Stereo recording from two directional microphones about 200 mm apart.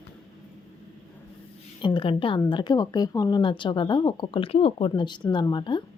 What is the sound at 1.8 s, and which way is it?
A woman's voice, 25° left (ahead or behind).